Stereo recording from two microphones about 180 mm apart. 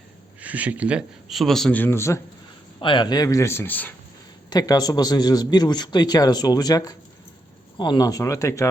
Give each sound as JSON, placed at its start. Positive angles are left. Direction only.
{"t": 0.3, "sound": "speech", "side_deg": -10}
{"t": 2.8, "sound": "speech", "side_deg": 25}
{"t": 4.4, "sound": "a man's voice", "side_deg": 20}